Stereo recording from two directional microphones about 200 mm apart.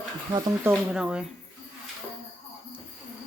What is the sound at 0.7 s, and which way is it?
Speech, 5° right (ahead or behind).